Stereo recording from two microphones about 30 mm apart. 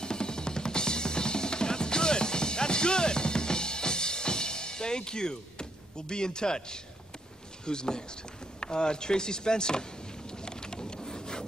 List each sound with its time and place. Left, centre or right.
0.0 s drum kit: left
7.6 s chopping: left
10.3 s boat: left